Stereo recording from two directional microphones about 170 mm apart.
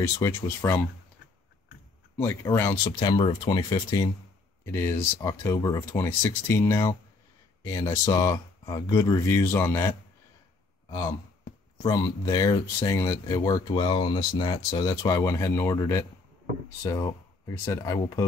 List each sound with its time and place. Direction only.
0.0 s speech: 15° left (ahead or behind)
2.1 s speech: 15° left (ahead or behind)
17.6 s speech: 20° left (ahead or behind)